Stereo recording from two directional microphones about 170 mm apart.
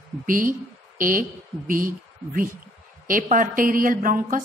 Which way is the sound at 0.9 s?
50° right (ahead or behind).